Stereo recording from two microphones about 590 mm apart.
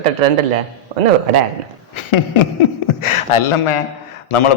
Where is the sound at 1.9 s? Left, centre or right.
Left.